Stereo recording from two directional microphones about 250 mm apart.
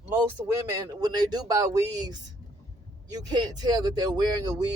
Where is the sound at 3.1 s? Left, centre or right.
Centre.